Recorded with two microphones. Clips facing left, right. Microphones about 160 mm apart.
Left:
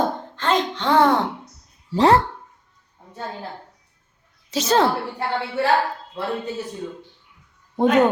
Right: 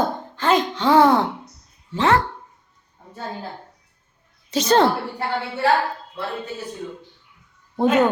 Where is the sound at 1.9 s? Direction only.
35° left (ahead or behind).